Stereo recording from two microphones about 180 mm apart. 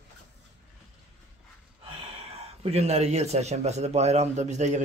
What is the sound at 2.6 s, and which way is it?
A man's voice, 35° right (ahead or behind).